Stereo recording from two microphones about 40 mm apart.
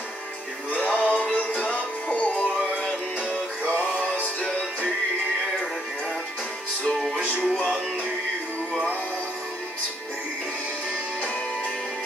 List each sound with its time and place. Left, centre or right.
0.7 s music: left
7.2 s music: left